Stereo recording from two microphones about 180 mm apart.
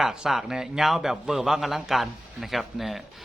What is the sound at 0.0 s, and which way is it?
A man's voice, 5° right (ahead or behind).